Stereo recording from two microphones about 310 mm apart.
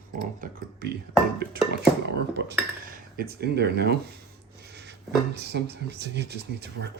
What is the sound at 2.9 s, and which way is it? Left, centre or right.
Speech, right.